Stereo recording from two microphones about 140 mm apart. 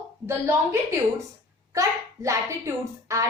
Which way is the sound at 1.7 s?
20° right (ahead or behind).